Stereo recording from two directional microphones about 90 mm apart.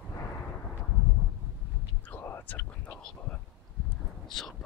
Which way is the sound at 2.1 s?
25° left (ahead or behind).